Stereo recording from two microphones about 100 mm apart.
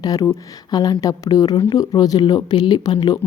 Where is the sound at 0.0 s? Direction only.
35° left (ahead or behind).